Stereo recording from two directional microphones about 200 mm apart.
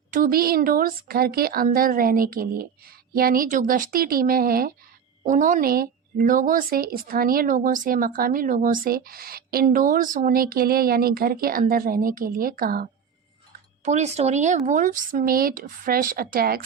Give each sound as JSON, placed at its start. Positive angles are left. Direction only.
{"t": 0.1, "sound": "a woman's voice", "side_deg": -45}
{"t": 13.8, "sound": "a woman's voice", "side_deg": -35}